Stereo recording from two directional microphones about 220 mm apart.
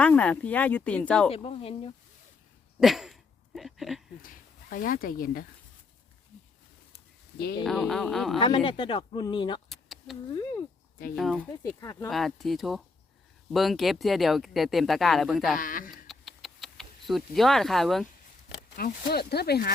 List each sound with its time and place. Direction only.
0.0 s speech: 5° left (ahead or behind)
1.3 s speech: 25° left (ahead or behind)
2.8 s a sound: centre (ahead or behind)
4.2 s speech: 40° left (ahead or behind)
7.6 s speech: centre (ahead or behind)
8.4 s speech: 20° left (ahead or behind)
9.6 s a sound: centre (ahead or behind)
11.1 s speech: centre (ahead or behind)
11.8 s speech: 15° left (ahead or behind)
12.1 s speech: centre (ahead or behind)
15.5 s speech: 40° left (ahead or behind)
16.0 s a sound: centre (ahead or behind)
18.8 s speech: 45° left (ahead or behind)